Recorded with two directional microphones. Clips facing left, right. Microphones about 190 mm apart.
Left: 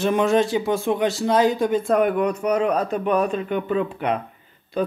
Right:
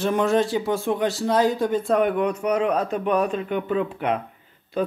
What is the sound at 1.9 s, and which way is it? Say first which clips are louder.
A man's voice: even; 5° left (ahead or behind).